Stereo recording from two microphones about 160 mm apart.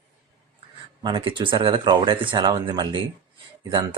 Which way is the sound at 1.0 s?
30° right (ahead or behind).